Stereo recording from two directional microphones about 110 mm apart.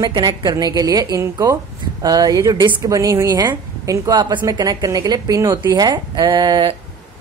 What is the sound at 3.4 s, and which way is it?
A woman's voice, 40° right (ahead or behind).